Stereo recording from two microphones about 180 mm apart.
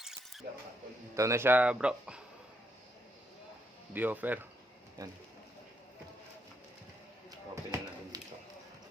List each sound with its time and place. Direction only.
0.0 s squish: 5° right (ahead or behind)
1.1 s speech: 15° right (ahead or behind)
3.9 s speech: 10° right (ahead or behind)
7.3 s a sound: 20° right (ahead or behind)